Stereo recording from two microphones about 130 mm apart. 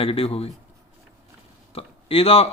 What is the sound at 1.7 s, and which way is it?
Speech, 45° left (ahead or behind).